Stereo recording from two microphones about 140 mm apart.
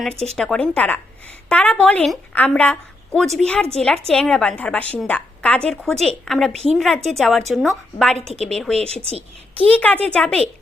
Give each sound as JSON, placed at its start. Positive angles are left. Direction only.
{"t": 0.3, "sound": "a woman's voice", "side_deg": 5}
{"t": 9.0, "sound": "a woman's voice", "side_deg": -45}
{"t": 9.6, "sound": "a woman's voice", "side_deg": 10}